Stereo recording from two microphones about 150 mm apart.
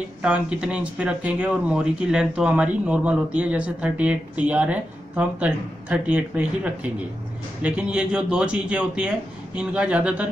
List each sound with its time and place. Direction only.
0.2 s speech: 5° right (ahead or behind)